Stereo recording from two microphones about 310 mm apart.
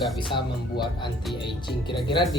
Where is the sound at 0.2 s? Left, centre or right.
Centre.